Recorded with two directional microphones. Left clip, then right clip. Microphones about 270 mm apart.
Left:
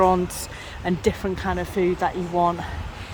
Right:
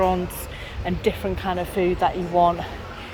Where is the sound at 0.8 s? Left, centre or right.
Left.